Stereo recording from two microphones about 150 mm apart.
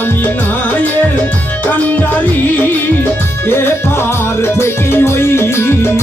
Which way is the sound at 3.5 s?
15° left (ahead or behind).